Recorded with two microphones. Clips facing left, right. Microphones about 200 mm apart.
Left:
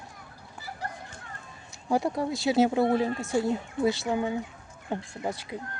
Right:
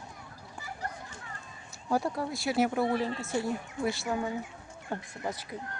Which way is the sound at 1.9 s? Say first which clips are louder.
Left 4 dB; 15° left (ahead or behind).